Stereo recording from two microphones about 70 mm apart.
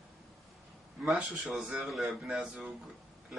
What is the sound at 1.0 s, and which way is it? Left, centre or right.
A man's voice, centre.